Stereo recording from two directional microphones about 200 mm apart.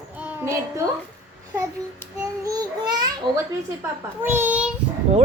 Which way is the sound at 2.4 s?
20° right (ahead or behind).